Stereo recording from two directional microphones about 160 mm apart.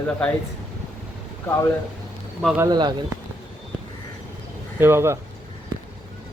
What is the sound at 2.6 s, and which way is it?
Speech, 25° right (ahead or behind).